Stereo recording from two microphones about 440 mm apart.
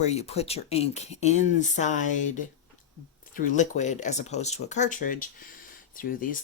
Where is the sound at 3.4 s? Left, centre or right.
Centre.